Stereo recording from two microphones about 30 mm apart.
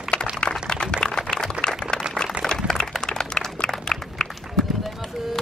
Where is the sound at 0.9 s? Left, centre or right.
Left.